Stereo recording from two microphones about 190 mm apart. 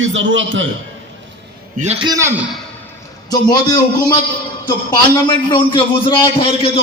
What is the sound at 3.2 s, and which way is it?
Speech, 20° left (ahead or behind).